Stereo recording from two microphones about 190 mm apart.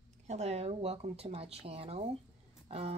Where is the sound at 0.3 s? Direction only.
35° right (ahead or behind).